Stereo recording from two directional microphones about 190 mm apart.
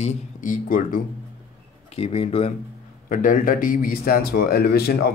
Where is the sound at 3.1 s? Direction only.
45° left (ahead or behind).